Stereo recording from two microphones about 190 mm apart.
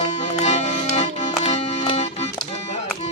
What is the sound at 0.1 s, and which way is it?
Music, 35° left (ahead or behind).